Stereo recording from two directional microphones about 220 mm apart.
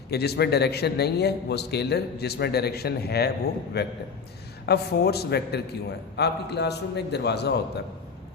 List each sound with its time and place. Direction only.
0.1 s a man's voice: 45° left (ahead or behind)